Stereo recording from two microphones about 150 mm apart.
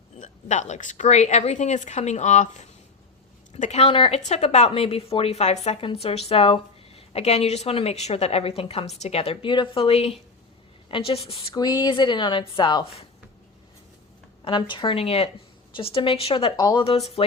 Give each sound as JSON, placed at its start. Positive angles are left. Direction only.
{"t": 0.2, "sound": "a woman's voice", "side_deg": 55}
{"t": 14.4, "sound": "a woman's voice", "side_deg": 35}
{"t": 16.6, "sound": "speech", "side_deg": 25}
{"t": 17.2, "sound": "a woman's voice", "side_deg": 40}